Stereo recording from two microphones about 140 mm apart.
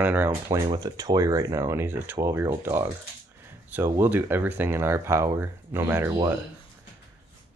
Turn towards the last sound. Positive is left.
turn(degrees=-15)  # may be behind; listen again after turning